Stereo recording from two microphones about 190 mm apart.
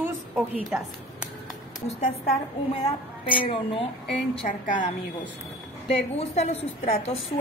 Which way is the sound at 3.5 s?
30° left (ahead or behind).